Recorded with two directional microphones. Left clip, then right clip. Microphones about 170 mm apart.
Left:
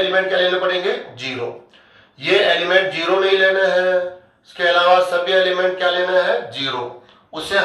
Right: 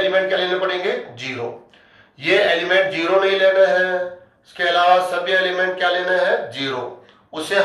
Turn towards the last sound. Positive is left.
turn(degrees=-25)  # may be behind; listen again after turning